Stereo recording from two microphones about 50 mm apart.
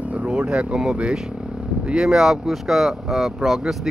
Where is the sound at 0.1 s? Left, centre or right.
Right.